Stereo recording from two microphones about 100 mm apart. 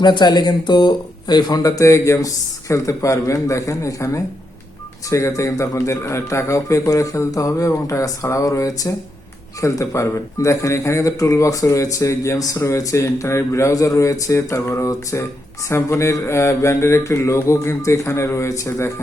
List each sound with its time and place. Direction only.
0.0 s speech: 45° left (ahead or behind); by 15.3 s 30° left (ahead or behind)
15.7 s mantra: 25° left (ahead or behind)